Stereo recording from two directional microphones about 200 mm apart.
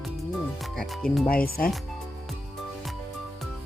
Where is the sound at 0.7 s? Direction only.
Centre (ahead or behind).